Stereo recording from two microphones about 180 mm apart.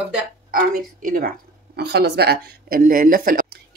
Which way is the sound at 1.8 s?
65° right (ahead or behind).